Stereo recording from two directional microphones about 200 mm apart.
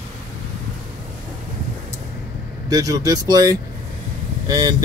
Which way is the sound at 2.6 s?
20° right (ahead or behind).